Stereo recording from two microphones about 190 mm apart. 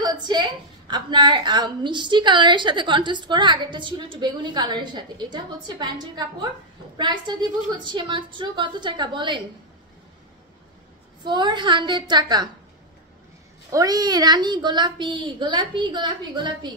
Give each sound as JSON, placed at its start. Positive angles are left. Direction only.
{"t": 0.0, "sound": "a woman's voice", "side_deg": -20}
{"t": 11.2, "sound": "a woman's voice", "side_deg": -25}
{"t": 13.7, "sound": "a woman's voice", "side_deg": -20}